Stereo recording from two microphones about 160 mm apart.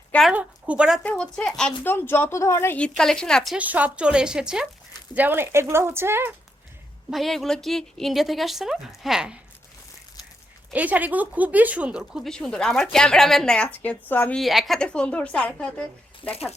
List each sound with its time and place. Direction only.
0.1 s a sound: centre (ahead or behind)
0.3 s a woman's voice: 10° right (ahead or behind)
1.0 s speech: 5° left (ahead or behind); by 6.3 s 15° right (ahead or behind)
7.1 s speech: centre (ahead or behind)
10.7 s speech: 10° right (ahead or behind); by 15.7 s 5° left (ahead or behind)
16.2 s speech: 40° left (ahead or behind)